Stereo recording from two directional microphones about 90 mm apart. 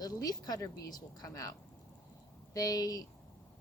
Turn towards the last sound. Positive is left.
turn(degrees=45)  # may be behind; listen again after turning